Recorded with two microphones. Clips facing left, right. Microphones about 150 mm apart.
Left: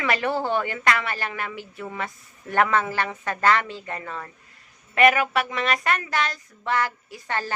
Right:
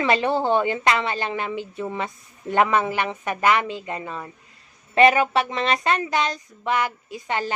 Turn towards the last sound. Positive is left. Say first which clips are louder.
# right 3 dB
turn(degrees=-20)  # may be behind; listen again after turning